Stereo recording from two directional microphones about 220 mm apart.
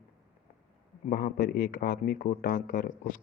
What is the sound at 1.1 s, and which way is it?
A man's voice, 40° left (ahead or behind).